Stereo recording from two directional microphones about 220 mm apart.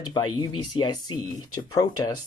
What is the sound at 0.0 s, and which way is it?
Speech, 20° left (ahead or behind).